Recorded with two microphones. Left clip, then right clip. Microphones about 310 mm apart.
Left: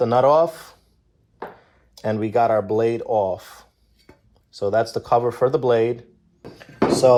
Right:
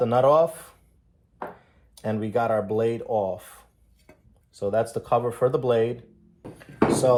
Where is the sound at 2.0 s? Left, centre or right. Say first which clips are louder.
Left 6 dB; left.